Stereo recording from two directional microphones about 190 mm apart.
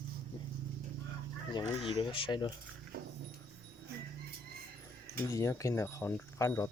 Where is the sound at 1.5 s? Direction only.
25° left (ahead or behind).